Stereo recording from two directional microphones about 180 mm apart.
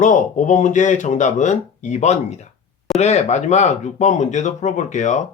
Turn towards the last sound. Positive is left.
turn(degrees=40)  # may be behind; listen again after turning